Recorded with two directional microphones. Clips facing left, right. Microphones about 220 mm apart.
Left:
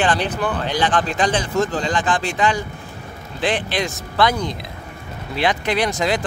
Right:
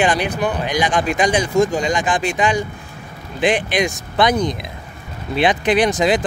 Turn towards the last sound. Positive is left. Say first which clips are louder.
# right 4 dB
turn(degrees=-15)  # may be behind; listen again after turning